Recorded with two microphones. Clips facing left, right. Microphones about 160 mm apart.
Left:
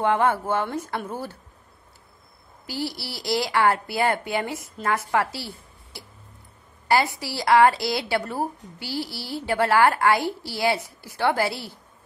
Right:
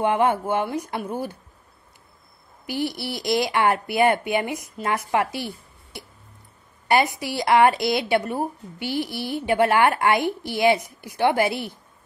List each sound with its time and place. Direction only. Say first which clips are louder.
0.0 s speech: right 1 dB; 15° right (ahead or behind)
2.6 s a woman's voice: right 4 dB; 20° right (ahead or behind)
5.9 s a sound: right 4 dB; 20° right (ahead or behind)
6.9 s a woman's voice: right 2 dB; 20° right (ahead or behind)